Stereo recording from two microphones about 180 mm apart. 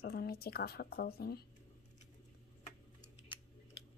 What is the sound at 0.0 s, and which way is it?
Speech, 55° left (ahead or behind).